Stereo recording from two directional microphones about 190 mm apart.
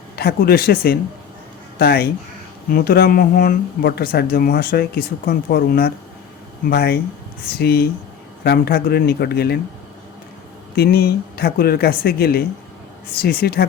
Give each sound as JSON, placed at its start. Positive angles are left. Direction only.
{"t": 0.2, "sound": "speech", "side_deg": 55}
{"t": 10.8, "sound": "speech", "side_deg": 55}